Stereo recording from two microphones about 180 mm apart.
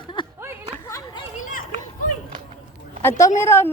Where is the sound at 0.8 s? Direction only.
15° left (ahead or behind).